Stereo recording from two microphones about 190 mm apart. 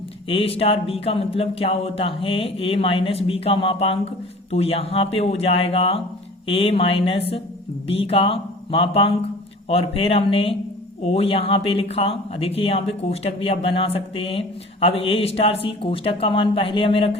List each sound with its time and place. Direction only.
0.3 s speech: 30° left (ahead or behind)